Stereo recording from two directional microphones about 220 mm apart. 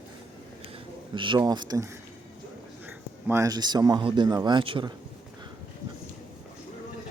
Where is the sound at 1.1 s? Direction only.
20° right (ahead or behind).